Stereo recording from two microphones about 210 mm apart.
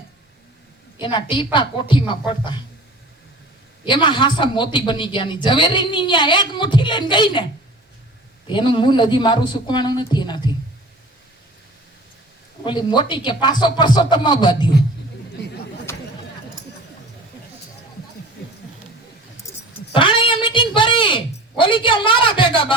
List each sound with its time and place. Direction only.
0.9 s a man's voice: 25° left (ahead or behind)
3.8 s a man's voice: 20° left (ahead or behind)
8.5 s a man's voice: 25° left (ahead or behind)
12.6 s a man's voice: 20° left (ahead or behind)
19.5 s keys jangling: 15° left (ahead or behind)
19.9 s a sound: 25° left (ahead or behind)
21.6 s a man's voice: 25° left (ahead or behind)